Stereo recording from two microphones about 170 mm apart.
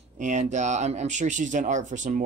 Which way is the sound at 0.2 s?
45° right (ahead or behind).